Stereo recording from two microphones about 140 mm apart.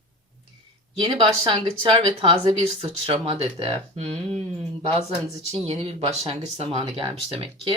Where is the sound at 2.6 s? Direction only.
45° right (ahead or behind).